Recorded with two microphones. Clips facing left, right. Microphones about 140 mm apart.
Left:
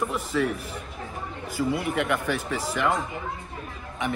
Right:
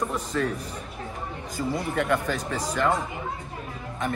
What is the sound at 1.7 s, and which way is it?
A man's voice, 10° left (ahead or behind).